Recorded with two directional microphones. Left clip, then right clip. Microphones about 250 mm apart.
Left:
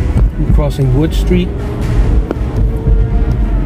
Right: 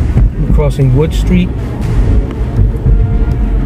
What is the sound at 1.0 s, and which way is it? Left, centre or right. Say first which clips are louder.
Speech: left 1 dB; centre.